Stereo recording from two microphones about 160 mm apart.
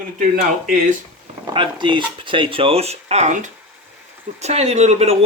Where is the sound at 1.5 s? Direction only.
30° right (ahead or behind).